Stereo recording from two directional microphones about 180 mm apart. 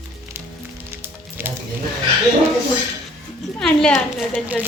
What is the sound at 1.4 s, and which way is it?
Music, 10° right (ahead or behind).